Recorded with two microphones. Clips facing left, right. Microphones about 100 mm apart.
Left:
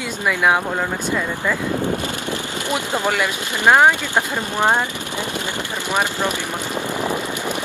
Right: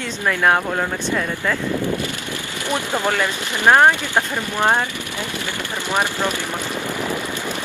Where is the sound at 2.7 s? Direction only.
15° left (ahead or behind).